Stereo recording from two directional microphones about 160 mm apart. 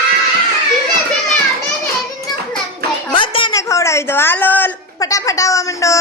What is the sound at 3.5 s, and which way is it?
A woman's voice, 20° left (ahead or behind).